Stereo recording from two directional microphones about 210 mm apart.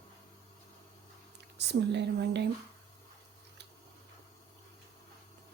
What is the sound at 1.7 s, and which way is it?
Speech, 55° right (ahead or behind).